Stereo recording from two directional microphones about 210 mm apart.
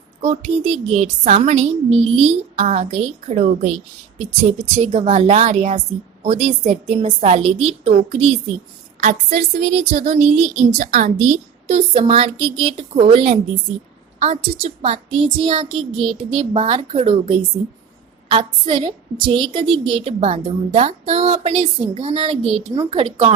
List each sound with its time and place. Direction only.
0.2 s a woman's voice: 35° right (ahead or behind)
4.7 s a woman's voice: 35° right (ahead or behind)